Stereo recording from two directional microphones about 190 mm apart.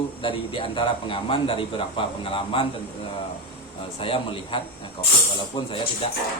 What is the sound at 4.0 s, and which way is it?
Speech, 30° left (ahead or behind).